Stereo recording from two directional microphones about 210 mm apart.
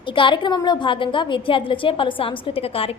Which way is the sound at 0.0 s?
25° left (ahead or behind).